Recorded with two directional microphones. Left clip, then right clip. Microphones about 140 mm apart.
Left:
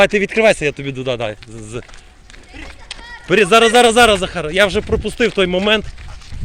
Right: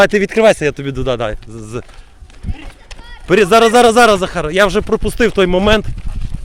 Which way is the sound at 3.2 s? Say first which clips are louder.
Right 2 dB; 35° right (ahead or behind).